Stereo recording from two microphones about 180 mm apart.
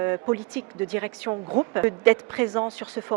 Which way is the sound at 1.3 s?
30° right (ahead or behind).